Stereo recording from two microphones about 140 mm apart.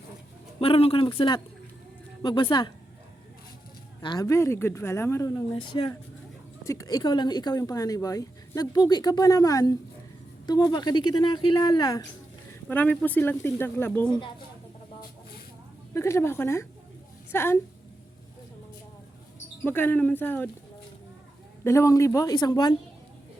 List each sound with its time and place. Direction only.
0.6 s speech: 40° left (ahead or behind)
4.0 s speech: 30° left (ahead or behind)
5.5 s speech: 35° left (ahead or behind)
6.7 s speech: 25° left (ahead or behind)
12.6 s speech: 10° left (ahead or behind)
16.0 s speech: 20° left (ahead or behind)
19.6 s speech: 15° left (ahead or behind)
21.6 s speech: 20° left (ahead or behind)